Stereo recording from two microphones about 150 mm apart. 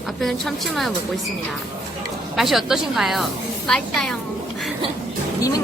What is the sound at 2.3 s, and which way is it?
A woman's voice, centre (ahead or behind).